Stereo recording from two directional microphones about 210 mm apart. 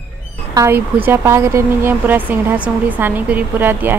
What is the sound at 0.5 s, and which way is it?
Speech, 10° right (ahead or behind).